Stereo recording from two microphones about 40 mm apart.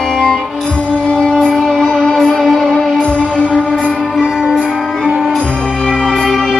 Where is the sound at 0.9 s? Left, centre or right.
Left.